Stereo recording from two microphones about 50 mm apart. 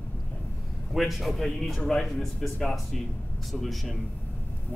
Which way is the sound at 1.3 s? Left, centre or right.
Centre.